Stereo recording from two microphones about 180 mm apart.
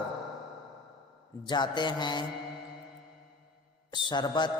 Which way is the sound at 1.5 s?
25° left (ahead or behind).